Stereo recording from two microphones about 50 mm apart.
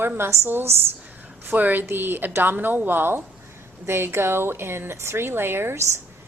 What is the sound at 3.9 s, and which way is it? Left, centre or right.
Speech, right.